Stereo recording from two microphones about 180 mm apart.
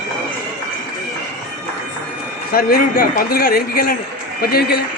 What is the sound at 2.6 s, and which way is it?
A man's voice, 55° left (ahead or behind).